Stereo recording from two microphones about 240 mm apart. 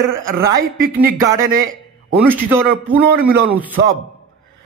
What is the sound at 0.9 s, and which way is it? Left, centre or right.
A man's voice, centre.